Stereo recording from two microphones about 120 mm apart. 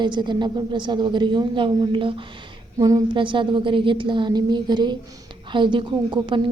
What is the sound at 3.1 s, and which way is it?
A woman's voice, 45° right (ahead or behind).